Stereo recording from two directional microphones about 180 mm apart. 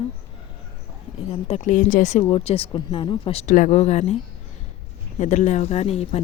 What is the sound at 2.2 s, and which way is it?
A woman's voice, 30° left (ahead or behind).